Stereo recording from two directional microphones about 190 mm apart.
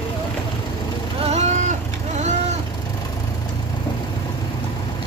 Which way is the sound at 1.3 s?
35° right (ahead or behind).